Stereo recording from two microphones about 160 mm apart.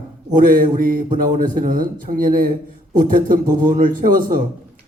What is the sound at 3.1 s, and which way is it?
Speech, 55° right (ahead or behind).